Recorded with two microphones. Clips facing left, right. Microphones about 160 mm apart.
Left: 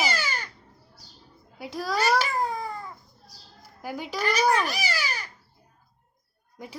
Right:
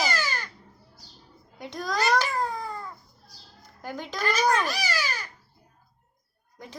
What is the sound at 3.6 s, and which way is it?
Speech, 10° left (ahead or behind).